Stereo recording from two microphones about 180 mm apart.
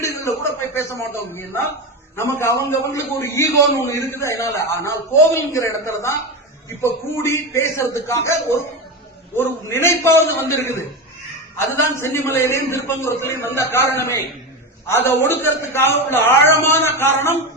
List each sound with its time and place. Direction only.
0.0 s a man's voice: 15° left (ahead or behind)
7.2 s a man's voice: 15° left (ahead or behind)